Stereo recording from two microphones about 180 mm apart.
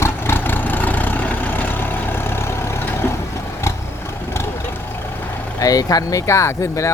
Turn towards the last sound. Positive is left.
turn(degrees=15)  # may be behind; listen again after turning